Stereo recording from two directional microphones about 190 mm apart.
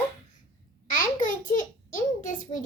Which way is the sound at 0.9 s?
45° left (ahead or behind).